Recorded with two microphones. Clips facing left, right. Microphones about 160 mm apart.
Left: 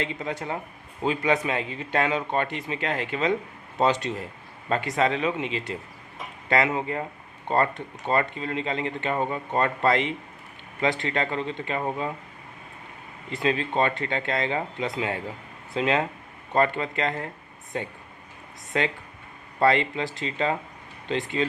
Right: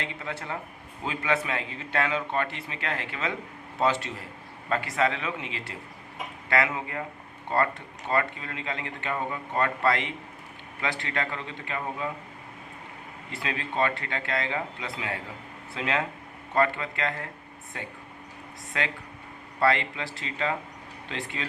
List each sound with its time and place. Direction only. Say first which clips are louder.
0.0 s a man's voice: left 5 dB; 20° left (ahead or behind)
13.3 s a man's voice: left 6 dB; 25° left (ahead or behind)
18.7 s a man's voice: left 5 dB; 30° left (ahead or behind)